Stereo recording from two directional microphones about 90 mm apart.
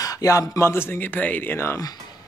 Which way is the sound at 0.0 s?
40° left (ahead or behind).